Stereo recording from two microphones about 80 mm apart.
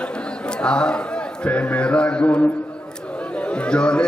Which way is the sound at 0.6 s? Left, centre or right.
Centre.